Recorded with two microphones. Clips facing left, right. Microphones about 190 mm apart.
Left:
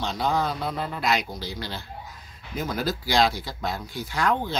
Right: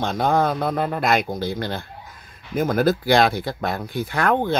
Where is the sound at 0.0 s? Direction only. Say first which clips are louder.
Right 6 dB; 50° right (ahead or behind).